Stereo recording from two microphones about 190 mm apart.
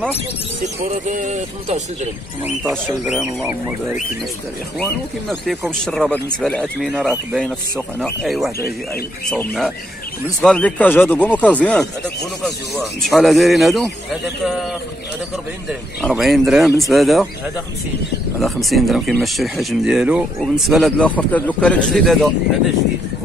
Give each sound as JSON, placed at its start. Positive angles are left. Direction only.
{"t": 1.0, "sound": "speech", "side_deg": -40}
{"t": 2.7, "sound": "speech", "side_deg": 0}
{"t": 5.3, "sound": "speech", "side_deg": 0}
{"t": 13.0, "sound": "speech", "side_deg": 0}
{"t": 16.0, "sound": "speech", "side_deg": 0}
{"t": 18.4, "sound": "speech", "side_deg": 0}